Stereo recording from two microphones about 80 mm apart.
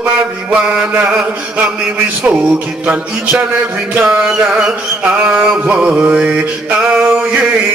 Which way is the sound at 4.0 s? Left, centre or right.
Centre.